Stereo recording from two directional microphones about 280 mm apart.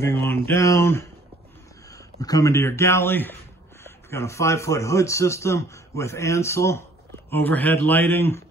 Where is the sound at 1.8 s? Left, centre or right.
Centre.